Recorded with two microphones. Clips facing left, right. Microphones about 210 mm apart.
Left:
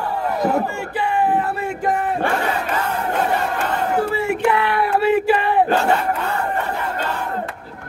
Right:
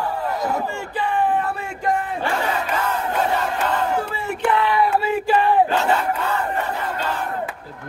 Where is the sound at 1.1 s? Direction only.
10° left (ahead or behind).